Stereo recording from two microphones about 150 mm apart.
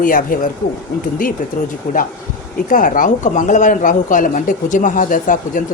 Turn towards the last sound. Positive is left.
turn(degrees=65)  # may be behind; listen again after turning